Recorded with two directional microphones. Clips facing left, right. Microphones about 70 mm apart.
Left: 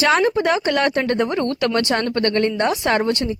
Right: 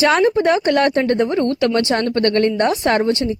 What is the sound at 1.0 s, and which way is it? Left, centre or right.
Speech, left.